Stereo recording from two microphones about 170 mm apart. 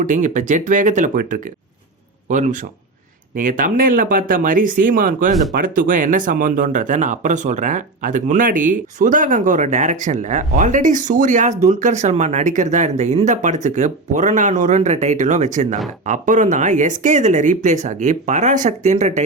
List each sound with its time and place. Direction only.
0.0 s speech: 50° right (ahead or behind)